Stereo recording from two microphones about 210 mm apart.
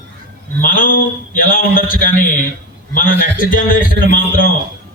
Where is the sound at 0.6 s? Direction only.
40° left (ahead or behind).